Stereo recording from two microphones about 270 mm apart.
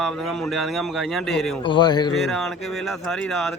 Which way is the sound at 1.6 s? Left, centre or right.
Centre.